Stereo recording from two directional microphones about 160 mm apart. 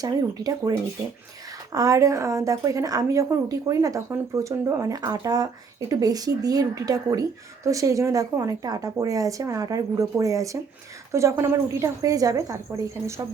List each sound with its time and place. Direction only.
0.0 s a woman's voice: 25° right (ahead or behind)
1.7 s a woman's voice: 20° right (ahead or behind)